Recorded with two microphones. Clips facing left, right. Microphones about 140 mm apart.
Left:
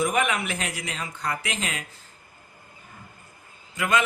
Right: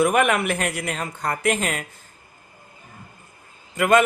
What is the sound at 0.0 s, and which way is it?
Speech, 60° right (ahead or behind).